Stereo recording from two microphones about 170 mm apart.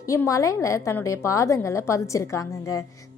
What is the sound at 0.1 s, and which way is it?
A woman's voice, 20° left (ahead or behind).